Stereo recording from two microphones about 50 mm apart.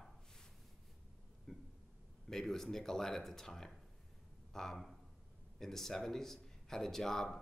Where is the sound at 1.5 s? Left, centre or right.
Centre.